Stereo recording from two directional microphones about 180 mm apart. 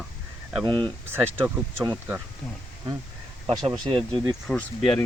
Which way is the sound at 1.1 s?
10° right (ahead or behind).